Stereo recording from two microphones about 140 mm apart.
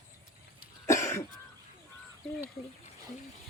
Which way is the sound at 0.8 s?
20° left (ahead or behind).